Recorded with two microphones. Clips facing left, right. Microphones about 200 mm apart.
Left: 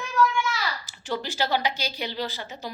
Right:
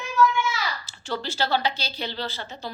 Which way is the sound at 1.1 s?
15° left (ahead or behind).